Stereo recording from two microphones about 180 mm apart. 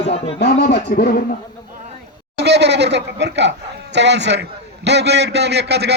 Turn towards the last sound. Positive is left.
turn(degrees=-65)  # may be behind; listen again after turning